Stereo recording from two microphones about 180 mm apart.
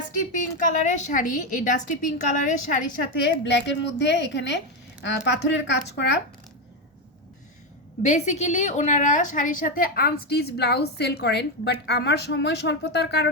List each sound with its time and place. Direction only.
0.3 s a woman's voice: 45° left (ahead or behind); by 6.1 s 75° left (ahead or behind)
8.0 s a woman's voice: 40° left (ahead or behind); by 13.3 s 70° left (ahead or behind)